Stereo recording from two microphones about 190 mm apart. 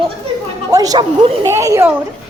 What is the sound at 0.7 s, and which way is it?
A woman's voice, 20° right (ahead or behind).